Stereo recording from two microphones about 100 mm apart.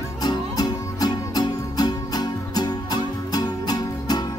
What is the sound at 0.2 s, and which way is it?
Music, 45° left (ahead or behind).